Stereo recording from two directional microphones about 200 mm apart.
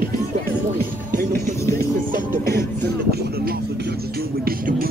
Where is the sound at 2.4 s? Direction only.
50° right (ahead or behind).